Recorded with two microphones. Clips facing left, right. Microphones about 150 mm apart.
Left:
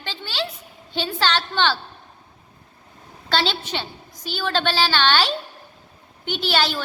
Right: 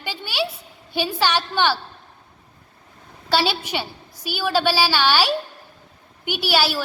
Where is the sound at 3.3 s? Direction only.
10° right (ahead or behind).